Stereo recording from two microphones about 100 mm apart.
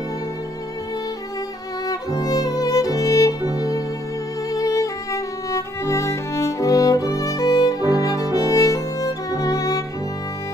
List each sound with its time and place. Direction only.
1.9 s music: 40° left (ahead or behind)